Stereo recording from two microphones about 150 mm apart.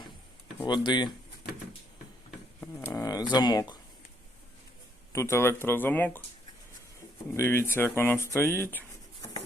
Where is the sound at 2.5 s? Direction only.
15° left (ahead or behind).